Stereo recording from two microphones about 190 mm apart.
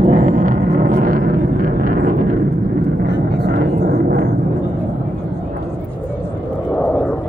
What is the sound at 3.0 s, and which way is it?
Vehicle, 55° right (ahead or behind).